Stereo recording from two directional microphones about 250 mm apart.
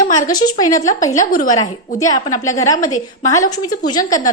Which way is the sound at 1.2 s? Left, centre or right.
Left.